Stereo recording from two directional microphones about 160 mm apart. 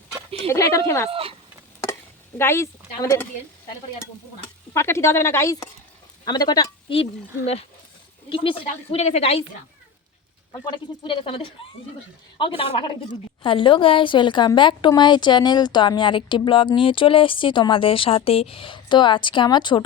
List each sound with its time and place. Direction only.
0.4 s speech: 20° left (ahead or behind)
1.1 s a sound: 35° right (ahead or behind)
2.4 s speech: 15° left (ahead or behind)
4.7 s a woman's voice: 15° left (ahead or behind); by 9.4 s 40° left (ahead or behind)
10.5 s a woman's voice: 30° left (ahead or behind)